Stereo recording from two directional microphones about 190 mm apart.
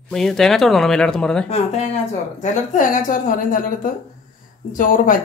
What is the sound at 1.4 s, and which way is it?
Speech, 35° left (ahead or behind).